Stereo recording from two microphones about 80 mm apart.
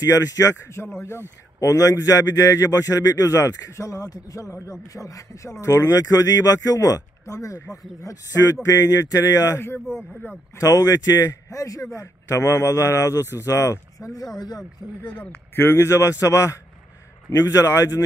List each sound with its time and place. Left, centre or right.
0.0 s a man's voice: left
10.5 s a man's voice: left
15.5 s a man's voice: left